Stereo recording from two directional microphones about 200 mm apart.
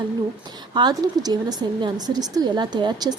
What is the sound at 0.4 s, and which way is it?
Speech, 20° right (ahead or behind).